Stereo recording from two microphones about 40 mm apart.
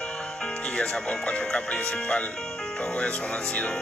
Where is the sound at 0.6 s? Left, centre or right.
Centre.